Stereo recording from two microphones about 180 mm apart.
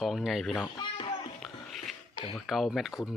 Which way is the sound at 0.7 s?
30° left (ahead or behind).